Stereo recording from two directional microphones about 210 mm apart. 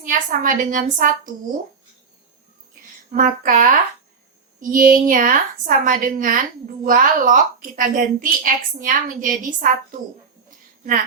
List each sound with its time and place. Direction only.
0.0 s a woman's voice: 40° right (ahead or behind)
3.1 s a woman's voice: 40° right (ahead or behind)